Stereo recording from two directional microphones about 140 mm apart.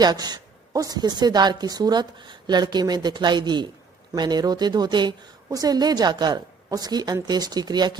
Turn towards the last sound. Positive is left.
turn(degrees=-30)  # may be behind; listen again after turning